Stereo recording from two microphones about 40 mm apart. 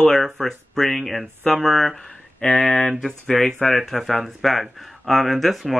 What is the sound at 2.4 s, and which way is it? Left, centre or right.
Speech, left.